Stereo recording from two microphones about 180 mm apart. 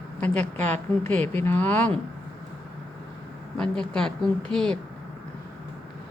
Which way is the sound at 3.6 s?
5° left (ahead or behind).